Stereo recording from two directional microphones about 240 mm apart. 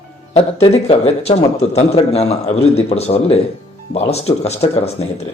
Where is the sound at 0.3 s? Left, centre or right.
Left.